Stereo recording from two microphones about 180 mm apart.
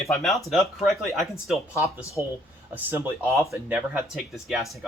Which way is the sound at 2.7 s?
10° right (ahead or behind).